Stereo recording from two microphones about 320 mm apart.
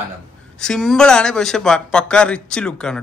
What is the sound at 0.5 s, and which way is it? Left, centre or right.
Speech, centre.